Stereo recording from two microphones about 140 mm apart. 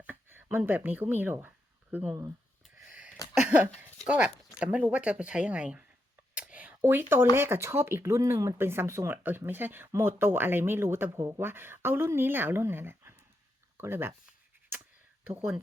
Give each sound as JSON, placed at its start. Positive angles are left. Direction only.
{"t": 0.0, "sound": "a sound", "side_deg": -15}
{"t": 0.5, "sound": "speech", "side_deg": -15}
{"t": 2.6, "sound": "a sound", "side_deg": -5}
{"t": 3.4, "sound": "speech", "side_deg": -10}
{"t": 6.3, "sound": "whispering", "side_deg": -10}
{"t": 7.3, "sound": "speech", "side_deg": -15}